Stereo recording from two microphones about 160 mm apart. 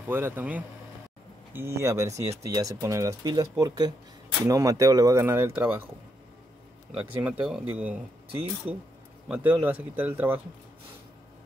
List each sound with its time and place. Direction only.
0.1 s speech: 15° right (ahead or behind)
6.9 s speech: 10° right (ahead or behind)